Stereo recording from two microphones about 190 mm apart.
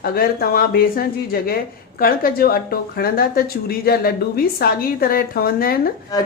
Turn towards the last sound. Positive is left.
turn(degrees=20)  # may be behind; listen again after turning